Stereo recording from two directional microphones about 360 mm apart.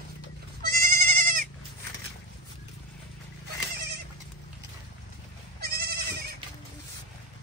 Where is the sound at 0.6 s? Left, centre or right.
Right.